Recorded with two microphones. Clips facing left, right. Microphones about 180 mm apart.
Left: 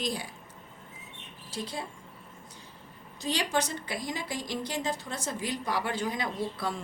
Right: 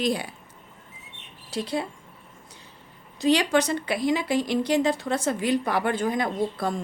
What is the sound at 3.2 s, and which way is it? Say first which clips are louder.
A woman's voice: right 9 dB; 70° right (ahead or behind).